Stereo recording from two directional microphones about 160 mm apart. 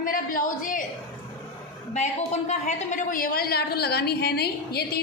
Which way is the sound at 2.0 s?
45° left (ahead or behind).